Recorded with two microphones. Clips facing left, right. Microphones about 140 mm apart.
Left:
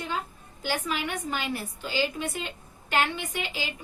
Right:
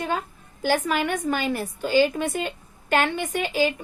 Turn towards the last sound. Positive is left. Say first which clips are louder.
# right 10 dB
turn(degrees=-50)  # may be behind; listen again after turning